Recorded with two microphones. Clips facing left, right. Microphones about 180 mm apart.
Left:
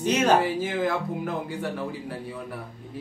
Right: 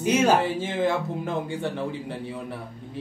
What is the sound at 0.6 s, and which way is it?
Speech, 25° right (ahead or behind).